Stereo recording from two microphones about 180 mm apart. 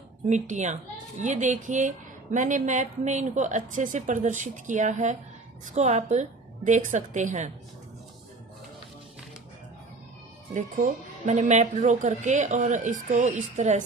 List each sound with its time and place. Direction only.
0.3 s a woman's voice: 40° right (ahead or behind)
10.5 s a woman's voice: 45° right (ahead or behind)